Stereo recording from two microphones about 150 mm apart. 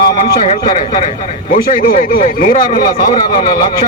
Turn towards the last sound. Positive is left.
turn(degrees=60)  # may be behind; listen again after turning